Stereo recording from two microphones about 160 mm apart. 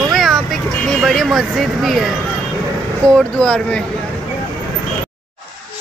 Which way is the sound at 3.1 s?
5° left (ahead or behind).